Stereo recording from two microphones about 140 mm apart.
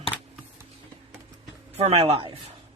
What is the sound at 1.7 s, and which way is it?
Speech, 45° right (ahead or behind).